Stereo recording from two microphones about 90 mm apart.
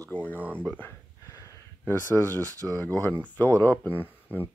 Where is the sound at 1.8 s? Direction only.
25° left (ahead or behind).